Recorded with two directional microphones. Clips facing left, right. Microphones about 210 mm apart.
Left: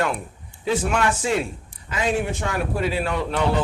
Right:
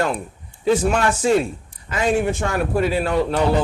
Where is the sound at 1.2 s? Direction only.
40° right (ahead or behind).